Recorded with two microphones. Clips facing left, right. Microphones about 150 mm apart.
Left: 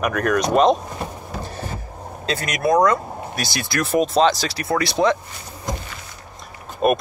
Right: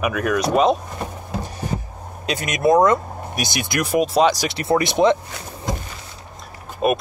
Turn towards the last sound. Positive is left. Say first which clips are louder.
# left 1 dB
turn(degrees=0)  # may be behind; listen again after turning